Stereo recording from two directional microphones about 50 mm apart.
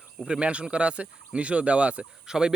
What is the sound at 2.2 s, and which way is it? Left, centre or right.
Speech, centre.